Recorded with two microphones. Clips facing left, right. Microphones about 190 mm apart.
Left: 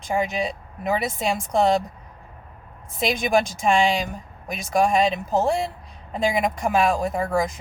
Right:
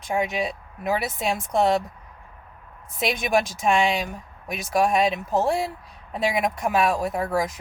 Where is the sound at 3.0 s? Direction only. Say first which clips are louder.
Left 2 dB; centre (ahead or behind).